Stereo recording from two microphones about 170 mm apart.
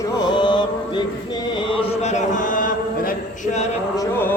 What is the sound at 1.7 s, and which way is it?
A man's voice, 35° left (ahead or behind).